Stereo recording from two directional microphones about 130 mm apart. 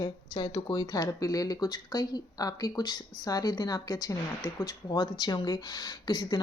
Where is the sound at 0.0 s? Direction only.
35° left (ahead or behind).